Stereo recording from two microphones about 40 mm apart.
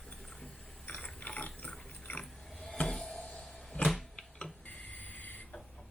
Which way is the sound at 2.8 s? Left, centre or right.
Left.